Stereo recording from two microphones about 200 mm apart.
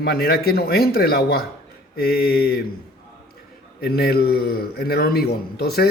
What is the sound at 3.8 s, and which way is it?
Speech, 50° left (ahead or behind).